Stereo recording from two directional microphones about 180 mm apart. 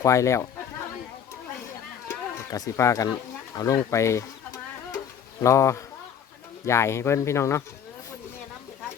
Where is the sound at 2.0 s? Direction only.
15° left (ahead or behind).